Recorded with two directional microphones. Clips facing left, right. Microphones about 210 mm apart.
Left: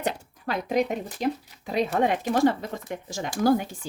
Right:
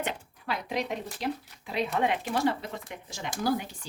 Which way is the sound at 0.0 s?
40° left (ahead or behind).